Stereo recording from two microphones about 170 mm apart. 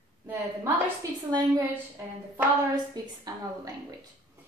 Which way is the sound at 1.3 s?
25° right (ahead or behind).